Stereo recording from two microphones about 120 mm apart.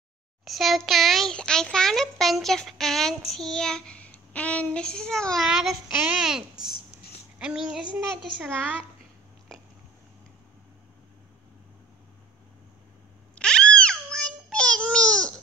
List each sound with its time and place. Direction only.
0.5 s a child's voice: centre (ahead or behind)
13.3 s babbling: 5° left (ahead or behind)